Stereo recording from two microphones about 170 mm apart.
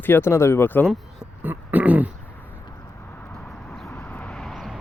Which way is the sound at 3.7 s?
10° left (ahead or behind).